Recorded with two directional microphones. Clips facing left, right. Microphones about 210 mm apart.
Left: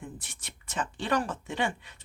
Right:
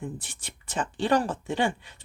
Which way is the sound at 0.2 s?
30° right (ahead or behind).